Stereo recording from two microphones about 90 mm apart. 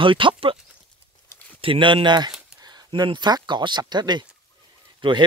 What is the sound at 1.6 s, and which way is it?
Speech, 75° right (ahead or behind).